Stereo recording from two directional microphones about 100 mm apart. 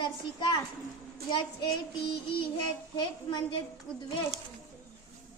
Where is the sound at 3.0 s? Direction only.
50° left (ahead or behind).